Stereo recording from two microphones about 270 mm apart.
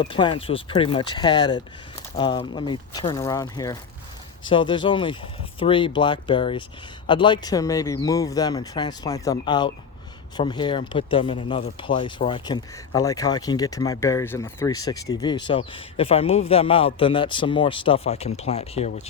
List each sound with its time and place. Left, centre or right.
0.0 s speech: centre